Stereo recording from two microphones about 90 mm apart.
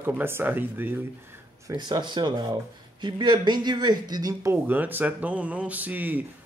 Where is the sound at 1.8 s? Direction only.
55° right (ahead or behind); by 4.6 s 35° right (ahead or behind).